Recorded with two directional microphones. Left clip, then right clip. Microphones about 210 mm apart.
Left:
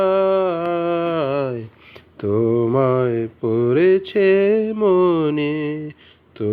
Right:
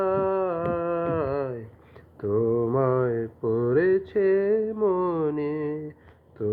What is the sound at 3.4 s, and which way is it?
Speech, 30° left (ahead or behind).